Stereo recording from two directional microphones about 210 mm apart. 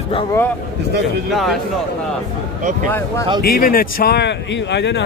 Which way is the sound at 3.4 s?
45° left (ahead or behind).